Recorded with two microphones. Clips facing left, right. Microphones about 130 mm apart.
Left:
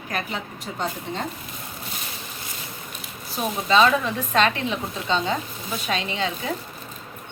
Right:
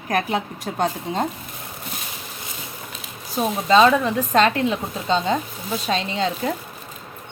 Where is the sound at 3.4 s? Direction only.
30° right (ahead or behind).